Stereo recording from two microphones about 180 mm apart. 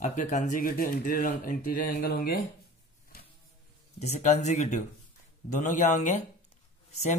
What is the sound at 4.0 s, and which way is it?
Speech, 40° left (ahead or behind).